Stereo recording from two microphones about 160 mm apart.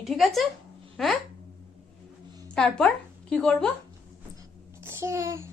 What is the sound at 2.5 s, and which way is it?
A woman's voice, 5° left (ahead or behind).